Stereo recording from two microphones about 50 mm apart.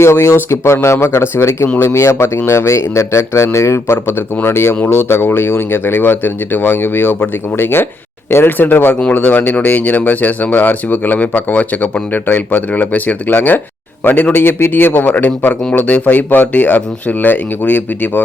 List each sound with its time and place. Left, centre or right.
0.0 s speech: left
4.4 s a man's voice: left